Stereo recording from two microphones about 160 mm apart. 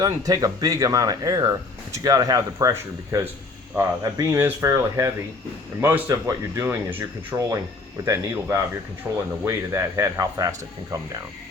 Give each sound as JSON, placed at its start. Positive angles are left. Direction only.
{"t": 0.0, "sound": "speech", "side_deg": -25}
{"t": 9.0, "sound": "speech", "side_deg": -5}
{"t": 9.5, "sound": "speech", "side_deg": -20}